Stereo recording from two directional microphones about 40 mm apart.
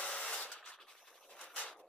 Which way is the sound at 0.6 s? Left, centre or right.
Centre.